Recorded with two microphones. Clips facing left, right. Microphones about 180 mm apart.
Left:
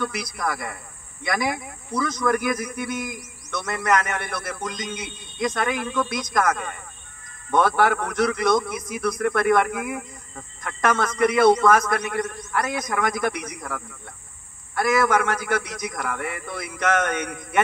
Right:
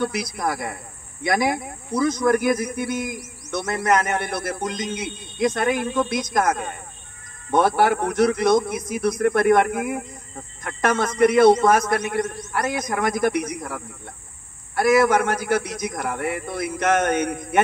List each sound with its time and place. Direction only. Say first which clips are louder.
0.1 s a man's voice: right 3 dB; 50° right (ahead or behind)
8.0 s a man's voice: right 4 dB; 50° right (ahead or behind)
13.6 s speech: right 2 dB; 30° right (ahead or behind)
14.8 s a man's voice: right 3 dB; 50° right (ahead or behind)